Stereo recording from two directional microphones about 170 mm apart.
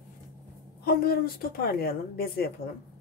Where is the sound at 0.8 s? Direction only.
65° left (ahead or behind).